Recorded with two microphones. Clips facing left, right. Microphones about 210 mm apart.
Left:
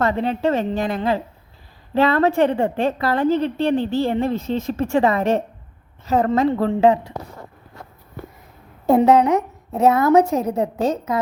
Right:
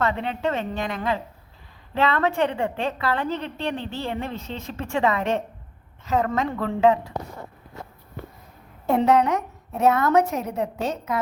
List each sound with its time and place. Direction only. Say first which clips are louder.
0.0 s a woman's voice: left 5 dB; 40° left (ahead or behind)
9.0 s a woman's voice: left 5 dB; 30° left (ahead or behind)